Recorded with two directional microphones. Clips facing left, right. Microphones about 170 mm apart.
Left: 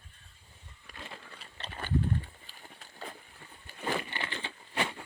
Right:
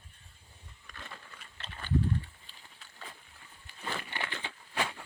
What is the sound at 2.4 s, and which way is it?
Run, 45° left (ahead or behind).